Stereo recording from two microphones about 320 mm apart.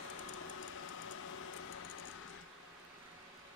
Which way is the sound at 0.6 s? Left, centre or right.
Left.